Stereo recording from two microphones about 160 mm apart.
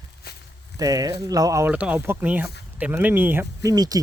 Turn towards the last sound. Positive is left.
turn(degrees=-25)  # may be behind; listen again after turning